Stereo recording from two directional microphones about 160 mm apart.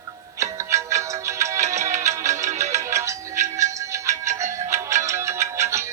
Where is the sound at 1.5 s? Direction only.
45° right (ahead or behind).